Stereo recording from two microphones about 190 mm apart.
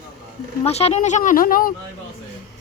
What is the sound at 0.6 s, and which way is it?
Speech, 35° left (ahead or behind).